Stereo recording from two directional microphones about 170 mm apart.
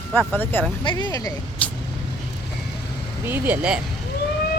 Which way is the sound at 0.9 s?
30° left (ahead or behind).